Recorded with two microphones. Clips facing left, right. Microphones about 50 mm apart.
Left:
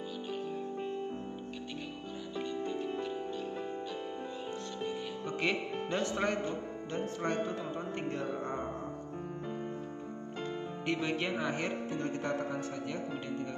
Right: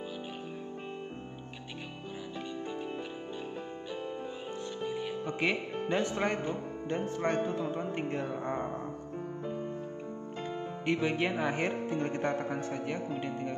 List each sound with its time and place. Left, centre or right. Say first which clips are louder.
2.3 s music: left 4 dB; centre
5.2 s speech: even; centre
10.9 s a man's voice: right 3 dB; centre